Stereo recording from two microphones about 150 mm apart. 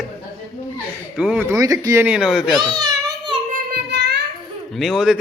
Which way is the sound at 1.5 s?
20° right (ahead or behind).